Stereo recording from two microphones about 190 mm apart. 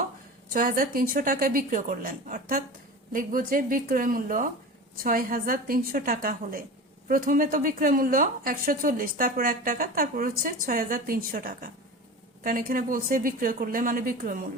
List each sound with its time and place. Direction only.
0.5 s a woman's voice: 45° right (ahead or behind)